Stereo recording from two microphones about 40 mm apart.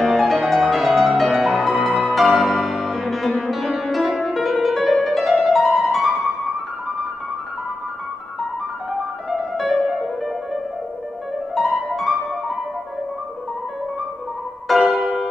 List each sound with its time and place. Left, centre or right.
0.0 s music: centre
9.6 s music: centre
14.7 s music: centre